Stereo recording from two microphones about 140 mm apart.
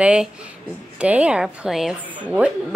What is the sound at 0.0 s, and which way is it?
Speech, 10° right (ahead or behind).